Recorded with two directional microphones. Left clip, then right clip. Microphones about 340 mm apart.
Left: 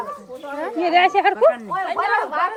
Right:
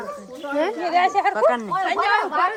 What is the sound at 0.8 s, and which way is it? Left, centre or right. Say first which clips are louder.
Speech: left 5 dB; left.